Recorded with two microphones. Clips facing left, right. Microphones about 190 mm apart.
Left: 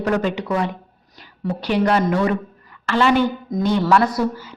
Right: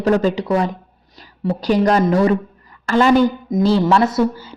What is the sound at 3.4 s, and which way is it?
A man's voice, 25° right (ahead or behind).